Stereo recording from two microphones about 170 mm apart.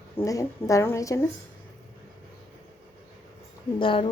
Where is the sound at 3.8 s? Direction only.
30° left (ahead or behind).